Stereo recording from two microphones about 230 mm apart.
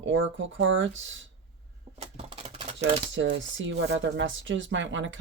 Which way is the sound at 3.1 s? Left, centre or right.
Right.